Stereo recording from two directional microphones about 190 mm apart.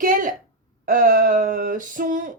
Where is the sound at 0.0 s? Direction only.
45° right (ahead or behind).